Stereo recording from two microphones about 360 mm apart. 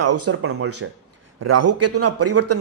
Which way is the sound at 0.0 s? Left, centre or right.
Right.